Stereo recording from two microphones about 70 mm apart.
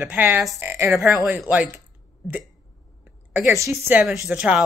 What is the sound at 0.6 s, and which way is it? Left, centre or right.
Speech, right.